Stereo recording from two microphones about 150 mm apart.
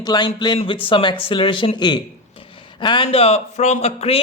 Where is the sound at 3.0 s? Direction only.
40° left (ahead or behind).